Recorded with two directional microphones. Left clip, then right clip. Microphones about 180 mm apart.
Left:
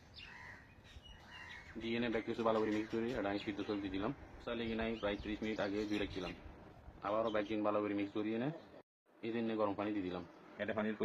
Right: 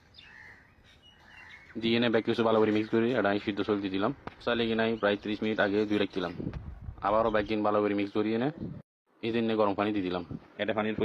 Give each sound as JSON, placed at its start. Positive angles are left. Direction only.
{"t": 1.8, "sound": "speech", "side_deg": -50}